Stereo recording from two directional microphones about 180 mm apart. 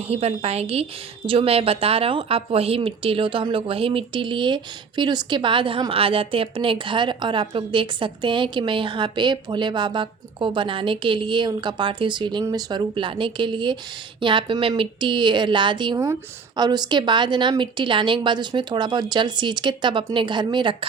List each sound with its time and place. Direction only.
0.0 s a woman's voice: 35° right (ahead or behind)